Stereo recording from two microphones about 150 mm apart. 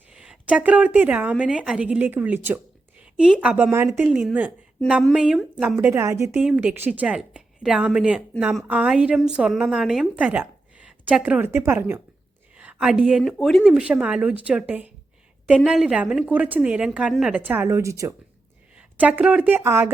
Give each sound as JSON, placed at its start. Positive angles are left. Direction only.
{"t": 0.1, "sound": "a woman's voice", "side_deg": -5}
{"t": 5.9, "sound": "a woman's voice", "side_deg": -20}
{"t": 6.3, "sound": "a woman's voice", "side_deg": -5}
{"t": 18.8, "sound": "speech", "side_deg": -10}